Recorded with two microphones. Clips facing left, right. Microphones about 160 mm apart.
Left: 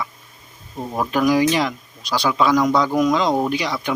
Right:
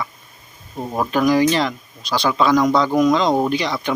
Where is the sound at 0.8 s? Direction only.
10° right (ahead or behind).